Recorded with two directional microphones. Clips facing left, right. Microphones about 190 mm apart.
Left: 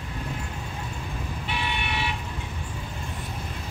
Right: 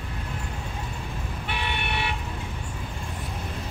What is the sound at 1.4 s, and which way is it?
Toot, 55° right (ahead or behind).